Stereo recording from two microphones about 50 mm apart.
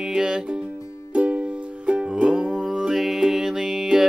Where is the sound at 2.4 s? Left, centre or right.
Centre.